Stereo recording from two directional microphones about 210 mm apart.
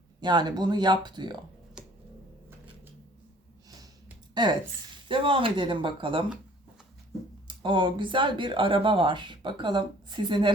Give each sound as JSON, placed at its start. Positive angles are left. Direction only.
{"t": 0.2, "sound": "speech", "side_deg": -20}
{"t": 1.8, "sound": "finger snapping", "side_deg": -5}
{"t": 4.4, "sound": "speech", "side_deg": -20}
{"t": 7.4, "sound": "speech", "side_deg": -20}